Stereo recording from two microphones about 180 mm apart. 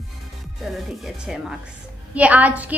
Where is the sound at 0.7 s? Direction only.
Centre (ahead or behind).